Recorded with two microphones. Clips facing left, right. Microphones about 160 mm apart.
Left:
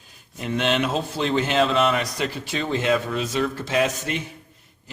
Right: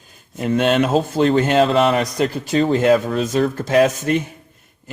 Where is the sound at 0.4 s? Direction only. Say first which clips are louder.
Right 6 dB; 45° right (ahead or behind).